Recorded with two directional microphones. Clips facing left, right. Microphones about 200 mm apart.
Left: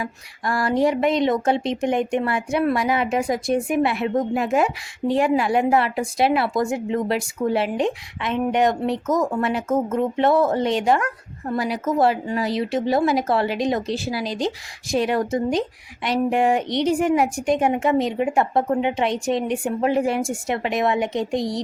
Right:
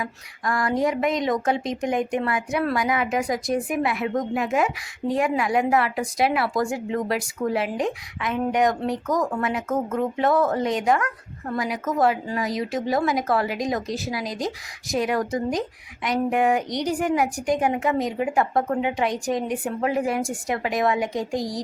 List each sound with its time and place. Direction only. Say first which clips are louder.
0.0 s speech: left 1 dB; 30° left (ahead or behind)